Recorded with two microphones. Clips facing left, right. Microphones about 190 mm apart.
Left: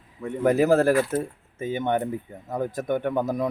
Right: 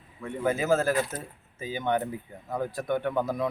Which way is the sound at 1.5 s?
50° left (ahead or behind).